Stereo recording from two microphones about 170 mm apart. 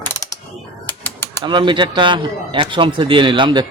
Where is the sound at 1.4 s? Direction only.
30° right (ahead or behind).